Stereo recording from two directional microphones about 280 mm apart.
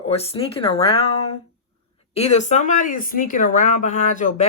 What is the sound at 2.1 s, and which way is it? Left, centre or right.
Speech, left.